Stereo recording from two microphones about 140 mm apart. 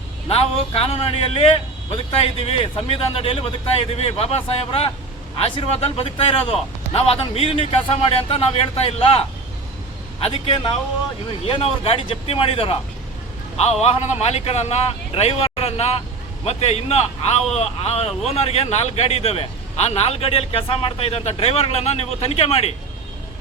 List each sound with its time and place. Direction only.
0.3 s a man's voice: 45° left (ahead or behind)
13.8 s a man's voice: 50° left (ahead or behind)